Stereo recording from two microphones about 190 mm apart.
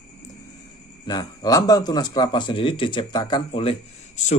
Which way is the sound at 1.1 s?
20° left (ahead or behind).